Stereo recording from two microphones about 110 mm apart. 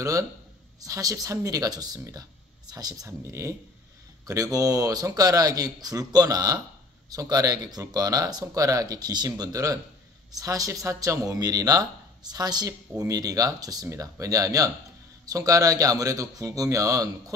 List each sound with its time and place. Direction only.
0.7 s speech: 35° right (ahead or behind)